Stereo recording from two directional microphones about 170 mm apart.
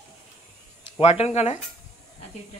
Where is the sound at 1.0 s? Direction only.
40° left (ahead or behind).